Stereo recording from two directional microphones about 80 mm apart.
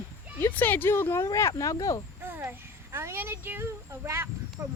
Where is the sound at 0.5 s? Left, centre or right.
Left.